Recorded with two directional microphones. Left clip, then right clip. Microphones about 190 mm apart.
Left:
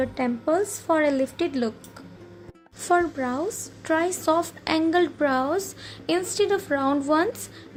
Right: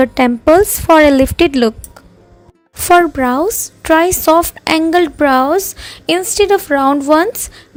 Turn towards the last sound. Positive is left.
turn(degrees=-40)  # may be behind; listen again after turning